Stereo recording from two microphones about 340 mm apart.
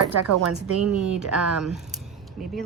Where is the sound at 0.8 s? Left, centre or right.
Centre.